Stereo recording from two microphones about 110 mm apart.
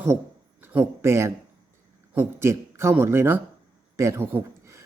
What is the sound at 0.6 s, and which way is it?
A man's voice, 15° right (ahead or behind).